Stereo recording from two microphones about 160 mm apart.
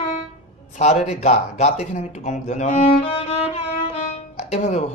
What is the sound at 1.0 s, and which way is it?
A man's voice, 45° left (ahead or behind).